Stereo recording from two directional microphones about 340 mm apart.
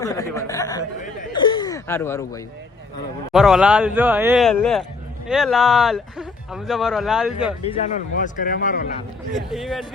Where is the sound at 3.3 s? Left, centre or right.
Centre.